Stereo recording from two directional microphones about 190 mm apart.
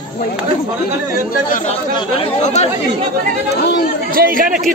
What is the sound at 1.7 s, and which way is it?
Speech, 30° left (ahead or behind).